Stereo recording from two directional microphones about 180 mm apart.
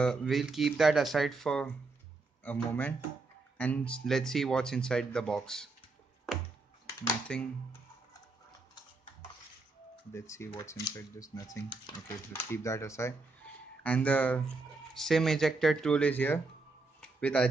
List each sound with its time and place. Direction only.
0.0 s speech: 5° left (ahead or behind)
7.3 s speech: 5° left (ahead or behind)
10.1 s speech: 15° left (ahead or behind)